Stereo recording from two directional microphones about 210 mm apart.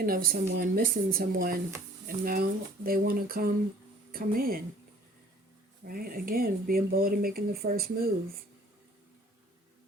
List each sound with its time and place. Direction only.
0.0 s speech: 45° right (ahead or behind)
5.9 s speech: 45° right (ahead or behind)